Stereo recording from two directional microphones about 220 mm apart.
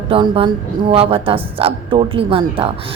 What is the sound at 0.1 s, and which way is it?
Speech, 20° right (ahead or behind).